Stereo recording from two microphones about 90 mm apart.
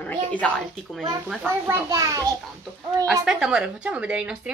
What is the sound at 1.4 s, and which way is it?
Speech, 30° right (ahead or behind).